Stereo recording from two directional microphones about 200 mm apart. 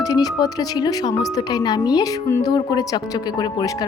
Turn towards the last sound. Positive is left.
turn(degrees=20)  # may be behind; listen again after turning